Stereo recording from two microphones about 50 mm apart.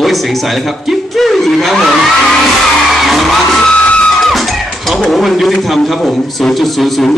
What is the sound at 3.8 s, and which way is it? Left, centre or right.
Music, left.